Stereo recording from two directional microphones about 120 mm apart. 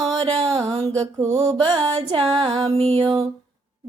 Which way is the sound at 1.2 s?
25° right (ahead or behind).